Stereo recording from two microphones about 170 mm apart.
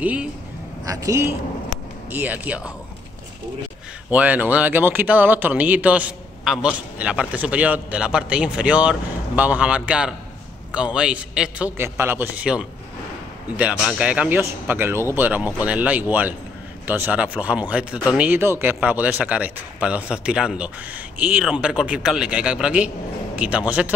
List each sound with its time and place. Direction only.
0.0 s speech: 10° right (ahead or behind)
0.8 s speech: 20° right (ahead or behind)
4.1 s speech: 10° right (ahead or behind)